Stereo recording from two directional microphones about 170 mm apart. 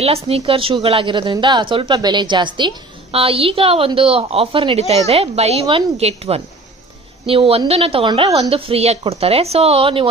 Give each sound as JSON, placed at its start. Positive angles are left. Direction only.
{"t": 0.0, "sound": "a woman's voice", "side_deg": -35}